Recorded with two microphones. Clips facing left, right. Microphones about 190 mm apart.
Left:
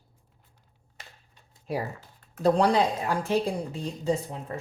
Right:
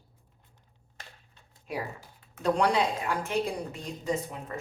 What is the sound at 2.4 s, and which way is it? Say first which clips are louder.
A woman's voice: left 4 dB; 35° left (ahead or behind).